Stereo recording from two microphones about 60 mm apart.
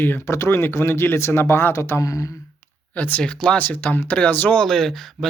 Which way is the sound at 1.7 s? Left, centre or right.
Left.